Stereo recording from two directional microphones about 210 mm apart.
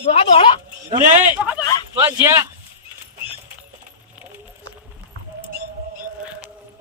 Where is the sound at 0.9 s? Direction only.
40° right (ahead or behind).